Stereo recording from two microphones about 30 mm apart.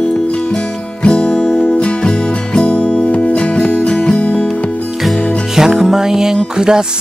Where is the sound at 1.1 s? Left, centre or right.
Left.